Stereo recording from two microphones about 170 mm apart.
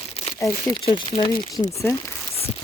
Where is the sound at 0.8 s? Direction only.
30° left (ahead or behind).